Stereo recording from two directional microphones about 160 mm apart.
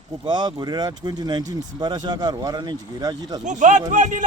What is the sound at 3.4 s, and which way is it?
Speech, 50° right (ahead or behind).